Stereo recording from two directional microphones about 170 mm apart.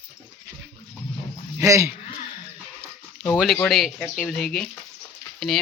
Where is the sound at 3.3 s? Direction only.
Centre (ahead or behind).